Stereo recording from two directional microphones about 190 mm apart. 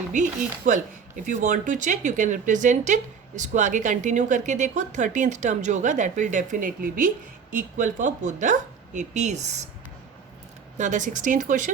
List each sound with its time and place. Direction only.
0.1 s speech: 40° right (ahead or behind)
10.8 s speech: 40° right (ahead or behind)